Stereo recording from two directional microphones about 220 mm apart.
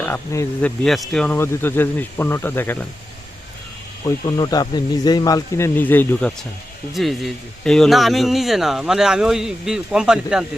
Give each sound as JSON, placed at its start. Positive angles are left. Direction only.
{"t": 0.0, "sound": "speech", "side_deg": 10}
{"t": 4.0, "sound": "speech", "side_deg": 20}